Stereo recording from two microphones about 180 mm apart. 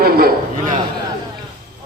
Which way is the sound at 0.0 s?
55° right (ahead or behind).